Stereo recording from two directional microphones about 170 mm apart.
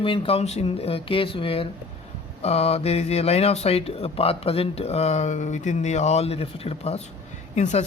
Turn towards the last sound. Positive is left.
turn(degrees=40)  # may be behind; listen again after turning